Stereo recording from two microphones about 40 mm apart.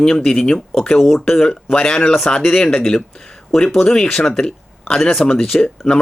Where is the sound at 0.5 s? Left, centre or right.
Centre.